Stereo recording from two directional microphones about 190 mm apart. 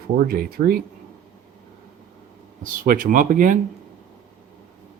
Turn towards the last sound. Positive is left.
turn(degrees=-45)  # may be behind; listen again after turning